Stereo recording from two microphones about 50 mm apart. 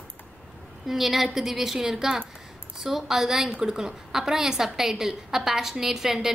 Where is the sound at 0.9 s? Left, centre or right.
Centre.